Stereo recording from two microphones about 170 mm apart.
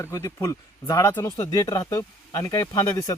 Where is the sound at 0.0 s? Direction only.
15° left (ahead or behind).